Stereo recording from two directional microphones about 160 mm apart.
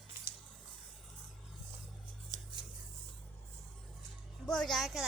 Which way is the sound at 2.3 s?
25° right (ahead or behind).